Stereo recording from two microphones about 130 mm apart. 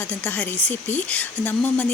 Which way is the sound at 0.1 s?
15° left (ahead or behind).